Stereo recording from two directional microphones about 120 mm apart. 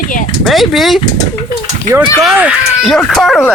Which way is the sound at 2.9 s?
Centre (ahead or behind).